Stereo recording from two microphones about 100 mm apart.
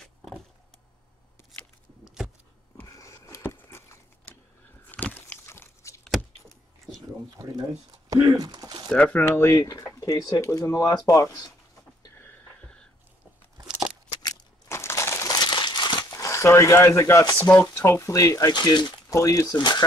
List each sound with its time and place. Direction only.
2.8 s a sound: 30° left (ahead or behind)
5.0 s a sound: 20° left (ahead or behind)
8.1 s speech: 35° right (ahead or behind)
8.8 s speech: 15° left (ahead or behind)
9.6 s speech: 40° left (ahead or behind)
12.2 s a sound: 15° left (ahead or behind)
14.7 s crushing: 25° left (ahead or behind)
15.3 s crumpling: 45° left (ahead or behind)
17.4 s speech: 20° left (ahead or behind)
18.5 s speech: 45° left (ahead or behind)
19.0 s speech: 35° left (ahead or behind)